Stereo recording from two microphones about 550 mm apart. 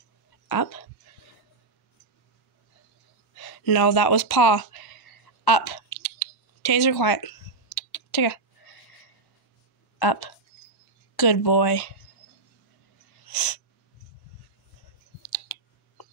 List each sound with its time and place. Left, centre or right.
0.5 s speech: left
3.3 s a sound: left
9.9 s speech: left
13.3 s sneeze: left